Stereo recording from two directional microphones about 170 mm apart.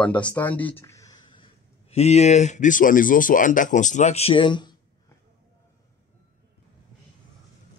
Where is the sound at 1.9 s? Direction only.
40° left (ahead or behind).